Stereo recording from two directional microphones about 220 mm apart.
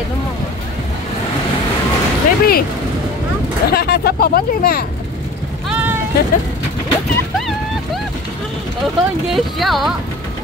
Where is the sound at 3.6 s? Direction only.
45° left (ahead or behind).